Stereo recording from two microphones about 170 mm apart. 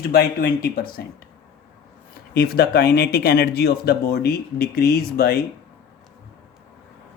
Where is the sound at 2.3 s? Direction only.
65° left (ahead or behind).